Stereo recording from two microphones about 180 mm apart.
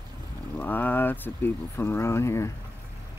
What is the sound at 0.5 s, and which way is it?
Speech, 10° left (ahead or behind).